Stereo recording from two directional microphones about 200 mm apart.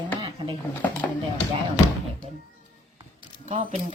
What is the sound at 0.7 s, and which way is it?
Speech, 10° left (ahead or behind).